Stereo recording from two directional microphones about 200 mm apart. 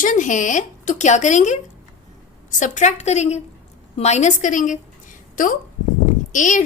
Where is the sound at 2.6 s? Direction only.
35° left (ahead or behind).